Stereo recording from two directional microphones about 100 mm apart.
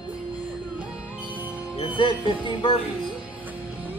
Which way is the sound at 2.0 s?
55° left (ahead or behind).